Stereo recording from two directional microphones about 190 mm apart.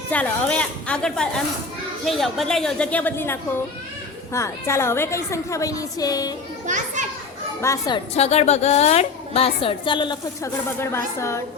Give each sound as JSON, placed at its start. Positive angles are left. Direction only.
{"t": 0.1, "sound": "a woman's voice", "side_deg": 5}
{"t": 7.6, "sound": "a woman's voice", "side_deg": 20}
{"t": 8.1, "sound": "a woman's voice", "side_deg": 35}